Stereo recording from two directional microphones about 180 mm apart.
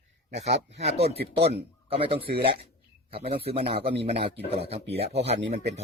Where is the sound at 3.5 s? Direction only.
60° right (ahead or behind).